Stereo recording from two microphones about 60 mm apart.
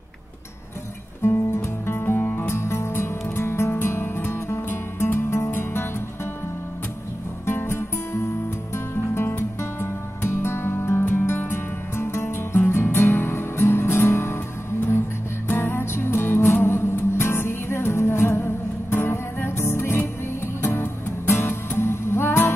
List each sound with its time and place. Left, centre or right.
1.2 s music: left
1.9 s music: left
7.4 s music: left
15.4 s music: left